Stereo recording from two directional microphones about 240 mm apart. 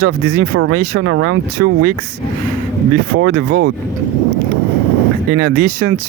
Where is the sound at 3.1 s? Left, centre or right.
Right.